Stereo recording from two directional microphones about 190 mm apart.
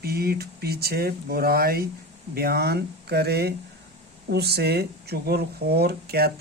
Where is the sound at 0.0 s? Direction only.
55° right (ahead or behind).